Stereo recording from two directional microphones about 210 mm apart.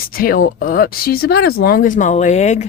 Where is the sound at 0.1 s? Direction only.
45° left (ahead or behind).